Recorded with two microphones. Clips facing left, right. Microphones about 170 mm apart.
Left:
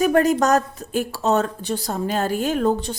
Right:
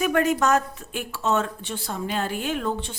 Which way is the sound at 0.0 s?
35° left (ahead or behind).